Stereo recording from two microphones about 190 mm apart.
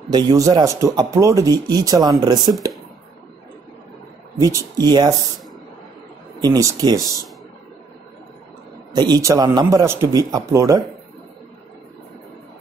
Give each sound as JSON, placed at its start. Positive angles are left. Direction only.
{"t": 0.1, "sound": "speech", "side_deg": -20}
{"t": 4.4, "sound": "speech", "side_deg": -15}
{"t": 6.4, "sound": "speech", "side_deg": -20}
{"t": 8.9, "sound": "speech", "side_deg": -20}